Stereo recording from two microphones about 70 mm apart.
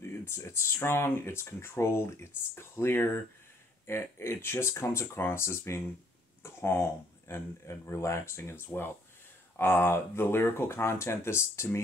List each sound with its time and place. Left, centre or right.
0.0 s speech: left